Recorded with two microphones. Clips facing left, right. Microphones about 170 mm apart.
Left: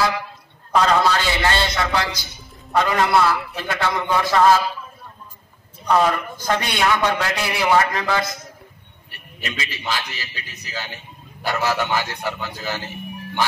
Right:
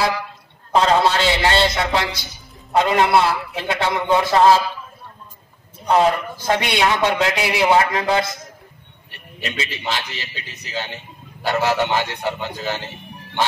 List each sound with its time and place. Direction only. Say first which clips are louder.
0.7 s a man's voice: right 1 dB; 25° right (ahead or behind)
5.9 s a man's voice: right 2 dB; 25° right (ahead or behind)
9.4 s a man's voice: right 3 dB; 25° right (ahead or behind)